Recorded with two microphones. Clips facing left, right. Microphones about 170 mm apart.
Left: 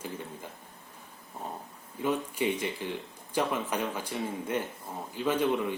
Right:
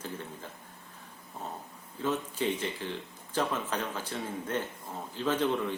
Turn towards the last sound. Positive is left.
turn(degrees=10)  # may be behind; listen again after turning